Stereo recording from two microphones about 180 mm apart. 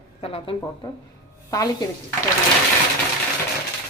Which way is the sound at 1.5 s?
20° left (ahead or behind).